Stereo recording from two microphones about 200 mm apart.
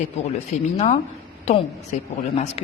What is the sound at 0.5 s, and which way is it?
Speech, 35° left (ahead or behind).